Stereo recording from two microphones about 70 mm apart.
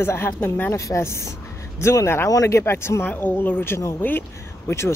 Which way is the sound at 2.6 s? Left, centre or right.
Left.